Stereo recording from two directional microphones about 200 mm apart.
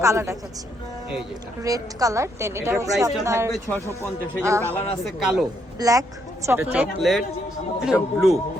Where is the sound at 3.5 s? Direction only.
10° left (ahead or behind).